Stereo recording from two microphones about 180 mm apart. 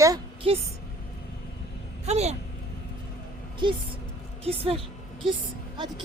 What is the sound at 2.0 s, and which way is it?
Speech, 35° right (ahead or behind).